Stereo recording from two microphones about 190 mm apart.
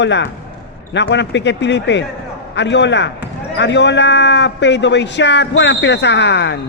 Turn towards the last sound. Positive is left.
turn(degrees=65)  # may be behind; listen again after turning